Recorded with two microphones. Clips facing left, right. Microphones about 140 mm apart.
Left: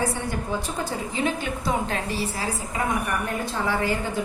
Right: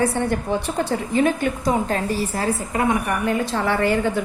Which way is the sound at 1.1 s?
50° right (ahead or behind).